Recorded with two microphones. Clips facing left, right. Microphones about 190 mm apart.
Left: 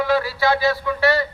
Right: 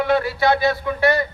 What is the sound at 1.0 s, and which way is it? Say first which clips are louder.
Speech: right 1 dB; 15° right (ahead or behind).